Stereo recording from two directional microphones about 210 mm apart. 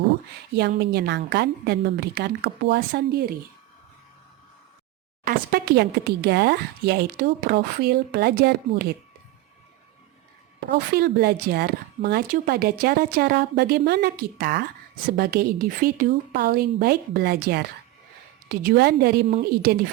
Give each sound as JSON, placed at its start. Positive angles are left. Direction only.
{"t": 0.8, "sound": "speech", "side_deg": -50}
{"t": 5.2, "sound": "speech", "side_deg": -45}
{"t": 10.7, "sound": "speech", "side_deg": -50}